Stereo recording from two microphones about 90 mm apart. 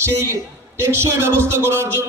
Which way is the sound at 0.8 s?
30° right (ahead or behind).